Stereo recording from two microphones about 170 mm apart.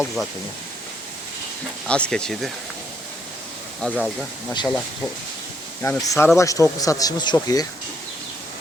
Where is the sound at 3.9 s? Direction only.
5° right (ahead or behind).